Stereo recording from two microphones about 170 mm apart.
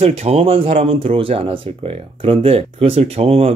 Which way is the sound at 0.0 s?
35° right (ahead or behind).